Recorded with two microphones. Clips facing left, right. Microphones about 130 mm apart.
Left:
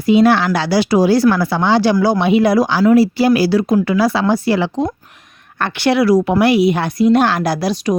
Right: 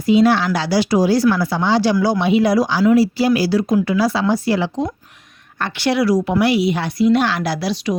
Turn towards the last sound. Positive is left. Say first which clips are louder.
# left 4 dB
turn(degrees=45)  # may be behind; listen again after turning